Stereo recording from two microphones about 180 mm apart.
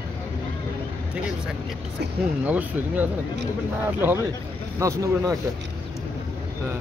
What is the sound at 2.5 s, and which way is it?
Speech, 10° right (ahead or behind).